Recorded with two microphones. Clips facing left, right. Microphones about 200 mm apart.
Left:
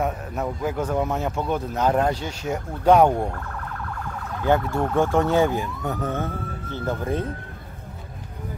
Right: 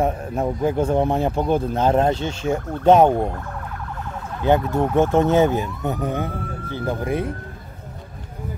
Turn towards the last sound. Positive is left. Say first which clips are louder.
# right 2 dB
turn(degrees=-10)  # may be behind; listen again after turning